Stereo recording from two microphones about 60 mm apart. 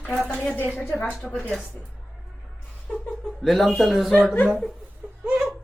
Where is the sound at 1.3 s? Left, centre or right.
Left.